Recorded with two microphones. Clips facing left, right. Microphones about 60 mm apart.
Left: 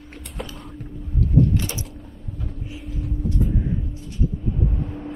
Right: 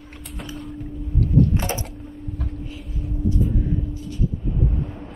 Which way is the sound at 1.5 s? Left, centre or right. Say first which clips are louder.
Right 2 dB; right.